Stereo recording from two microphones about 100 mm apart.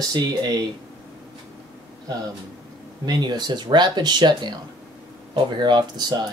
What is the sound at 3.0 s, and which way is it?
Speech, 45° right (ahead or behind).